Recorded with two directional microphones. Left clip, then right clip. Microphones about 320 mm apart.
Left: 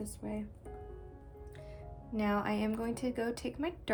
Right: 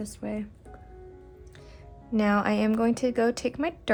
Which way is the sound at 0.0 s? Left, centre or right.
Right.